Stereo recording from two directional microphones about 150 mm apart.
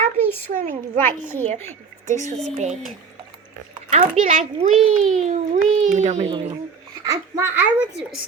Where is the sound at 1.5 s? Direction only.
50° right (ahead or behind).